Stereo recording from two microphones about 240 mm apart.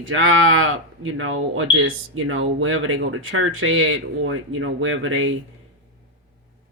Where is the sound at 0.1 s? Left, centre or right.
Right.